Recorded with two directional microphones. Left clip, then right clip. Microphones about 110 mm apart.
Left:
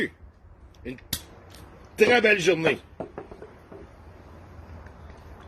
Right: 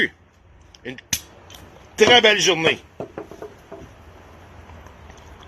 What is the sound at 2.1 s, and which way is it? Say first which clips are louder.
Speech: right 7 dB; 90° right.